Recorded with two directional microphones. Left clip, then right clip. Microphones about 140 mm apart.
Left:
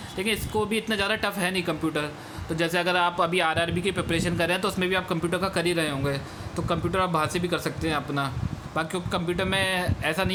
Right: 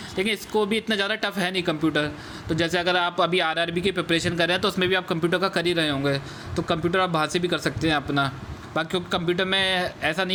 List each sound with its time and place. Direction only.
0.2 s speech: 35° right (ahead or behind)